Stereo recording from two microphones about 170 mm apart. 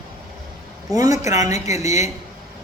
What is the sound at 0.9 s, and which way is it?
Speech, 20° right (ahead or behind).